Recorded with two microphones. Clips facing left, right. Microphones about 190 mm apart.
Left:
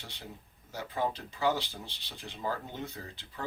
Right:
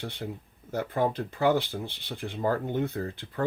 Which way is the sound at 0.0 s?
55° right (ahead or behind).